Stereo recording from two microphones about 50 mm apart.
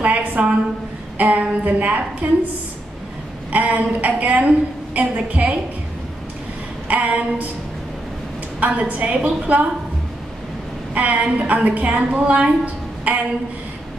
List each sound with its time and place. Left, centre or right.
0.0 s a sound: right
1.1 s a woman's voice: right
3.5 s a woman's voice: right
6.9 s a woman's voice: right
8.5 s a woman's voice: right
11.0 s a woman's voice: right